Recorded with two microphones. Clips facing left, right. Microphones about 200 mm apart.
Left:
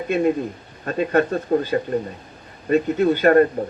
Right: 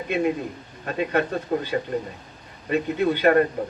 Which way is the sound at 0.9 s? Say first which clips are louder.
Left 4 dB; 40° left (ahead or behind).